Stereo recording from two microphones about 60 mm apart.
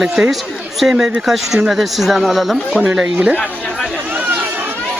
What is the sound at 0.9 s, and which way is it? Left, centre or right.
Speech, centre.